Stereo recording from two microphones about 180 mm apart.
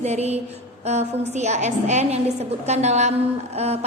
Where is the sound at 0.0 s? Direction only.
35° right (ahead or behind).